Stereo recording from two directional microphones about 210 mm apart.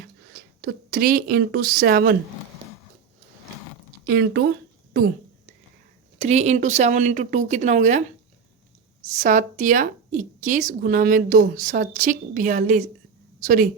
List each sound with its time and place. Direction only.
0.0 s speech: 45° right (ahead or behind)
4.0 s speech: 45° right (ahead or behind)
6.1 s a woman's voice: 30° right (ahead or behind)
9.1 s a woman's voice: 35° right (ahead or behind)